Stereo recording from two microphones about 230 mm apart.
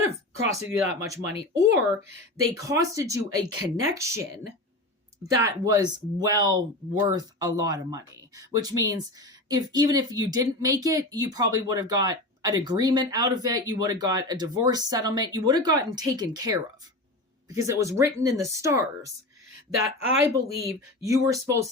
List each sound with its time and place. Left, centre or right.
0.3 s speech: centre
5.3 s speech: centre
20.2 s speech: centre